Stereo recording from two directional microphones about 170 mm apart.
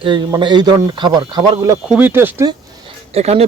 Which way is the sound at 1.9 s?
10° right (ahead or behind).